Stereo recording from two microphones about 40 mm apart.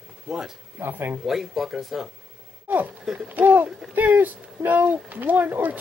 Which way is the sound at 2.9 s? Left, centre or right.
Centre.